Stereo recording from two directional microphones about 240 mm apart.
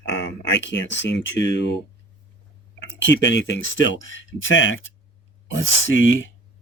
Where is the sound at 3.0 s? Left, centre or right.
Left.